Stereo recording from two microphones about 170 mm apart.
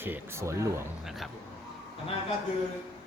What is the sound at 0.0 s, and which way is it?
Speech, 15° right (ahead or behind).